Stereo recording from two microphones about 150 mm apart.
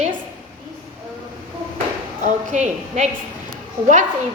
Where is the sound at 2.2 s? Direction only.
55° right (ahead or behind).